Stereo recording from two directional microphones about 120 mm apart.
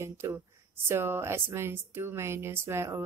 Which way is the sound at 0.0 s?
20° right (ahead or behind).